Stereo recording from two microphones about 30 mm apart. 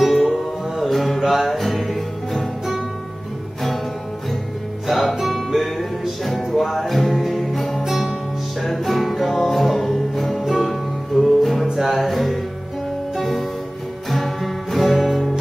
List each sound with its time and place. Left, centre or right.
0.1 s music: centre
1.2 s music: centre
5.2 s music: centre
11.6 s music: centre
11.9 s music: centre